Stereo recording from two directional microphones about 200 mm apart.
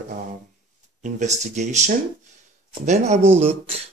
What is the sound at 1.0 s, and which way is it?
Speech, 35° right (ahead or behind).